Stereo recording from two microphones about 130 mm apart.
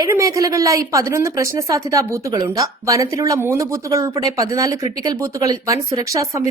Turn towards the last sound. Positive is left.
turn(degrees=-25)  # may be behind; listen again after turning